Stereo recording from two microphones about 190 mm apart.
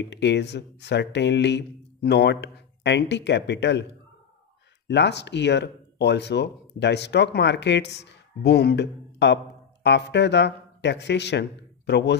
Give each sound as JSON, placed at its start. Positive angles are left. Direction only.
{"t": 0.1, "sound": "speech", "side_deg": 65}
{"t": 4.8, "sound": "speech", "side_deg": 65}